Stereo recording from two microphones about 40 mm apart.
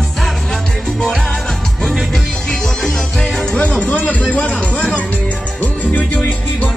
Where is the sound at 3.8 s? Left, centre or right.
Left.